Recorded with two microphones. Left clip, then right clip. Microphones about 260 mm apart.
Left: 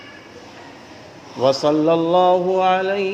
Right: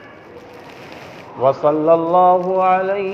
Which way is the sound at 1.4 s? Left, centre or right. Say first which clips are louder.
Right 1 dB; left.